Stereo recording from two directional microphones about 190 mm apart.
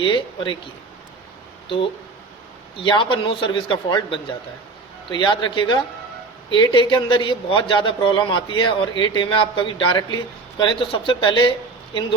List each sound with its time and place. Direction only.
0.0 s a man's voice: 25° left (ahead or behind)
2.7 s a man's voice: 25° left (ahead or behind)